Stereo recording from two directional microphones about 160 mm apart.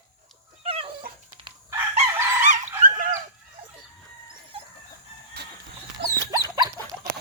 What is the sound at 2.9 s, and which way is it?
Chicken, 60° right (ahead or behind).